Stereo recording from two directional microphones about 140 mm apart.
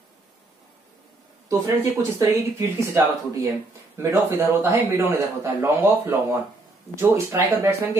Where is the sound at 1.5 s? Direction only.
25° right (ahead or behind).